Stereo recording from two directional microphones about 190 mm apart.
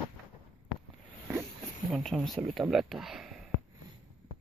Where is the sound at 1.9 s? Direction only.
Centre (ahead or behind).